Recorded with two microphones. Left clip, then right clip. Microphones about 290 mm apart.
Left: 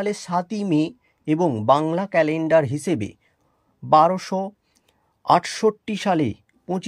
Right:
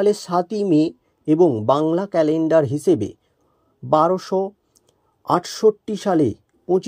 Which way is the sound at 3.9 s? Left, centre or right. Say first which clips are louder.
Left 1 dB; centre.